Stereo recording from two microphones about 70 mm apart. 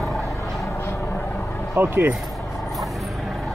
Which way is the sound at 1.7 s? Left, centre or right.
Right.